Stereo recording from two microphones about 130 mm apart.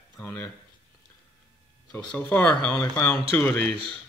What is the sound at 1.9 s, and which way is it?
Speech, 15° left (ahead or behind).